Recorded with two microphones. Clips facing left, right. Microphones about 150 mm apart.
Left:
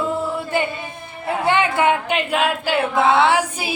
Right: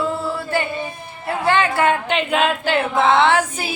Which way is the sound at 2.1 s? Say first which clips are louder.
Right 1 dB; 5° left (ahead or behind).